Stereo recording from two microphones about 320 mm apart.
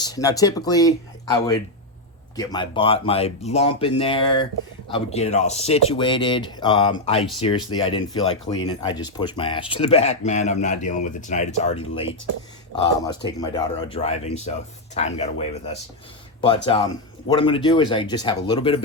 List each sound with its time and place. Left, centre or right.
0.0 s speech: centre
2.3 s speech: centre